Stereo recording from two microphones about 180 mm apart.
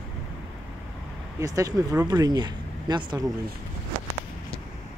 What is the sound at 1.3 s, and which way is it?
Speech, 20° right (ahead or behind).